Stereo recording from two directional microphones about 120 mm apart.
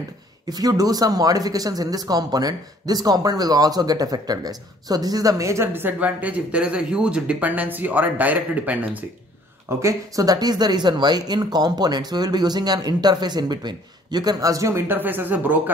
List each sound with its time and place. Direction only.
0.5 s speech: 30° right (ahead or behind); by 9.0 s 15° right (ahead or behind)
9.8 s speech: 25° right (ahead or behind)